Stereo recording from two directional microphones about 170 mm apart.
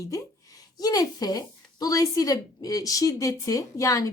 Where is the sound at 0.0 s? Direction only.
20° left (ahead or behind).